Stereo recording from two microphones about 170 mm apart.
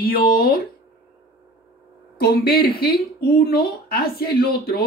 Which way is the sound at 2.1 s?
65° left (ahead or behind).